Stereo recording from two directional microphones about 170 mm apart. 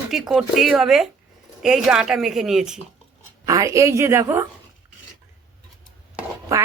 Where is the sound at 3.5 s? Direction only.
20° right (ahead or behind).